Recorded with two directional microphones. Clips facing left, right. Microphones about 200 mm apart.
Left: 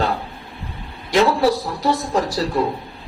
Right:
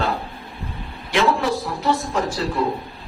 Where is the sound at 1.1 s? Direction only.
40° left (ahead or behind).